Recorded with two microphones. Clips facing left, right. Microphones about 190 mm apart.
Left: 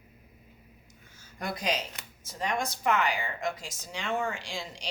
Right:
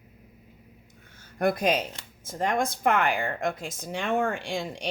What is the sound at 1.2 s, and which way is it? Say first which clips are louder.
Speech: right 11 dB; 55° right (ahead or behind).